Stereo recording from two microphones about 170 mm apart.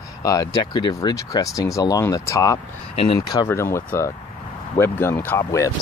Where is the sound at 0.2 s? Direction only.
20° left (ahead or behind).